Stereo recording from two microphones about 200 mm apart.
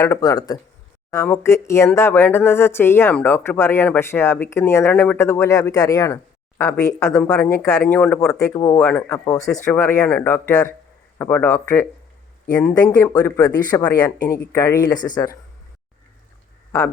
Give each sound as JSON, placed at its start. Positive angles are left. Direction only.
{"t": 0.0, "sound": "speech", "side_deg": 15}
{"t": 12.9, "sound": "speech", "side_deg": 15}